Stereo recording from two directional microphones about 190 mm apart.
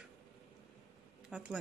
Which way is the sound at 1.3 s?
5° right (ahead or behind).